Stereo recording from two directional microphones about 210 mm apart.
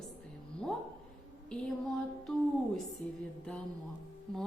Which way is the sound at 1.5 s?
Centre (ahead or behind).